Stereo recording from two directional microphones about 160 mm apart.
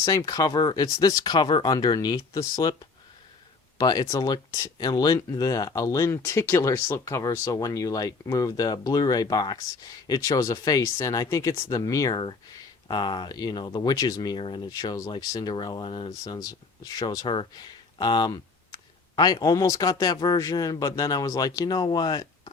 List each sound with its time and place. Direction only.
0.0 s speech: 20° left (ahead or behind)
3.8 s speech: 25° left (ahead or behind)